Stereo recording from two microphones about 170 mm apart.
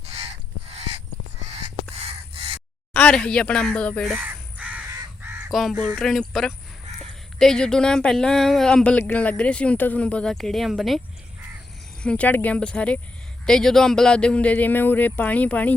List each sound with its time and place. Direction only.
0.7 s crow: 40° right (ahead or behind)
2.0 s caw: 35° right (ahead or behind)
2.9 s speech: 5° left (ahead or behind)
4.2 s crow: 10° right (ahead or behind)
5.5 s speech: centre (ahead or behind)
12.0 s speech: 10° left (ahead or behind)